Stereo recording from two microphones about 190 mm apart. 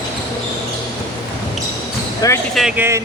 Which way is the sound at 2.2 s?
20° left (ahead or behind).